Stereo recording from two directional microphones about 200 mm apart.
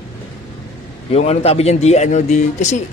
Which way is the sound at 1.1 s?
30° left (ahead or behind).